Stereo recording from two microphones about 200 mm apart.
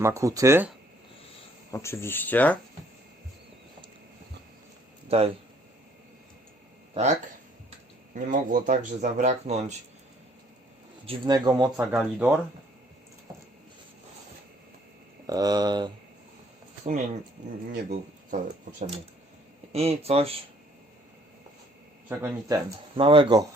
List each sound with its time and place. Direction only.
0.0 s speech: 15° right (ahead or behind)
1.7 s speech: 15° left (ahead or behind)
5.0 s speech: 30° right (ahead or behind)
8.1 s speech: 40° right (ahead or behind)
11.0 s speech: 25° right (ahead or behind)
11.9 s speech: 10° right (ahead or behind)
15.3 s speech: 20° right (ahead or behind)
17.7 s speech: 45° right (ahead or behind); by 20.4 s 30° right (ahead or behind)
22.1 s speech: 15° right (ahead or behind)
23.0 s speech: 25° right (ahead or behind)